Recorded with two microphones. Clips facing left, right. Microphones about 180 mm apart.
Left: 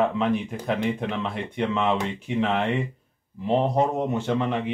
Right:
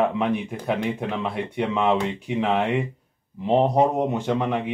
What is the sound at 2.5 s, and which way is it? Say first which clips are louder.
Speech: right 2 dB; 15° right (ahead or behind).